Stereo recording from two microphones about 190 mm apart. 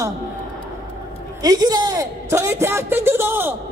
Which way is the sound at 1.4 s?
20° right (ahead or behind).